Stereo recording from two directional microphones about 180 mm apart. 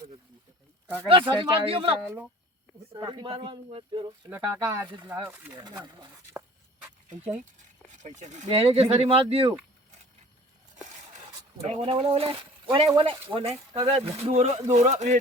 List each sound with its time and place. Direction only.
1.0 s speech: 25° right (ahead or behind)
2.0 s speech: 5° right (ahead or behind)
2.9 s speech: 25° right (ahead or behind)
4.3 s speech: 10° right (ahead or behind)
8.0 s speech: 40° right (ahead or behind)
11.8 s speech: 30° right (ahead or behind)